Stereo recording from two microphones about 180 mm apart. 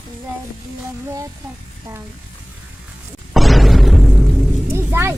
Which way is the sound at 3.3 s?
Centre (ahead or behind).